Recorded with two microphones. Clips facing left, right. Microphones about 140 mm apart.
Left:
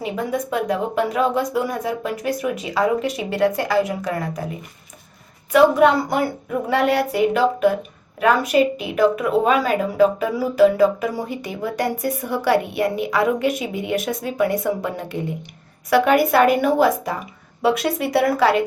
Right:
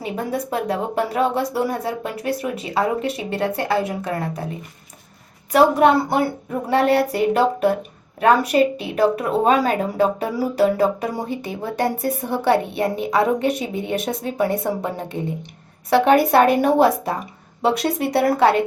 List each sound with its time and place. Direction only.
0.0 s speech: 35° right (ahead or behind)